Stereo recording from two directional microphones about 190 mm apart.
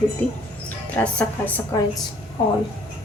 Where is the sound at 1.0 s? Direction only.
10° left (ahead or behind).